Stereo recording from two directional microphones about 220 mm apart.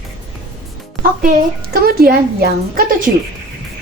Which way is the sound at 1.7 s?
45° right (ahead or behind).